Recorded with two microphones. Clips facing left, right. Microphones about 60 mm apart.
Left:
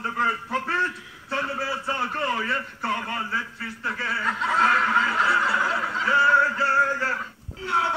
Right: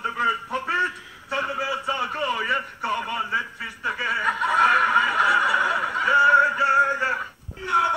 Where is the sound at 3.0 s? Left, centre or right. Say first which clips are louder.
Right 1 dB; left.